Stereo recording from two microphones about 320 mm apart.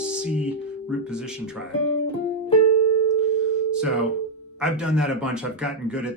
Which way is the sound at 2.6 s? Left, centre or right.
Left.